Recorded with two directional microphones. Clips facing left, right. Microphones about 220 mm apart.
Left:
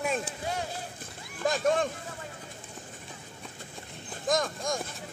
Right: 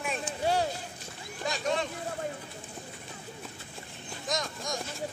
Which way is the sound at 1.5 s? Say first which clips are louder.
Left 5 dB; 50° left (ahead or behind).